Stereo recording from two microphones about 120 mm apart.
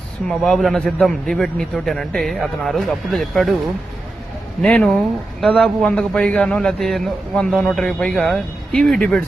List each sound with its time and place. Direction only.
0.3 s a man's voice: 5° left (ahead or behind)
4.6 s a man's voice: 10° left (ahead or behind)